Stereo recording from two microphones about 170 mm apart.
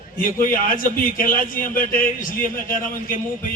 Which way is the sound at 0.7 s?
55° left (ahead or behind).